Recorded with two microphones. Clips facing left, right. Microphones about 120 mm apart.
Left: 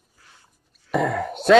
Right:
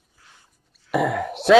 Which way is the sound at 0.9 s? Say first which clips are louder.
Right 1 dB; 5° right (ahead or behind).